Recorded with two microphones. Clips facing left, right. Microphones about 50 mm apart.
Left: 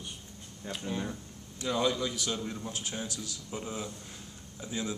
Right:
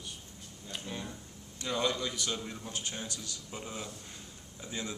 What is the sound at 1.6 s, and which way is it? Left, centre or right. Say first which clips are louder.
A man's voice: left 3 dB; centre.